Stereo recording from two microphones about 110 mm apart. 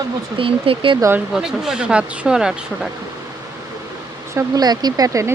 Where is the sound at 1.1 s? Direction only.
5° right (ahead or behind).